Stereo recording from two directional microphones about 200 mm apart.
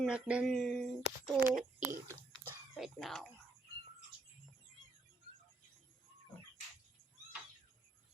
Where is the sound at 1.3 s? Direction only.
45° right (ahead or behind).